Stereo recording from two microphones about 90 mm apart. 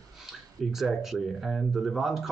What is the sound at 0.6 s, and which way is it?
Speech, centre (ahead or behind).